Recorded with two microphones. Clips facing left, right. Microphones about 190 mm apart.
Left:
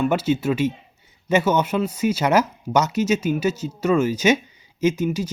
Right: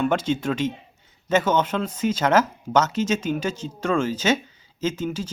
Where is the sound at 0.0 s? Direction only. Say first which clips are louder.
Left 2 dB; 10° left (ahead or behind).